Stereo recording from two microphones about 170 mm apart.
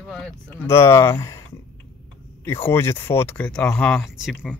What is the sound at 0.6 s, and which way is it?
Speech, 15° left (ahead or behind).